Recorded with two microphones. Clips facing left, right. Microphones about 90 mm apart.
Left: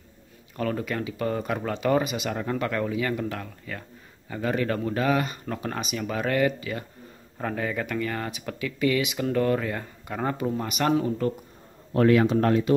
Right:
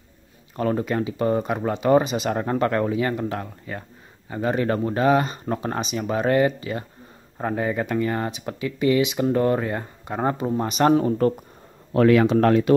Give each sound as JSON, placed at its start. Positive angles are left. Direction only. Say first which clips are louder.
{"t": 0.6, "sound": "speech", "louder": "right 5 dB", "side_deg": -30}
{"t": 11.9, "sound": "speech", "louder": "right 3 dB", "side_deg": -90}